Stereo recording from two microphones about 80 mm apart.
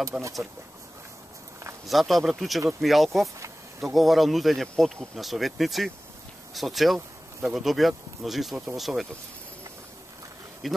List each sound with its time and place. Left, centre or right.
0.1 s speech: centre
1.9 s speech: centre
10.6 s speech: centre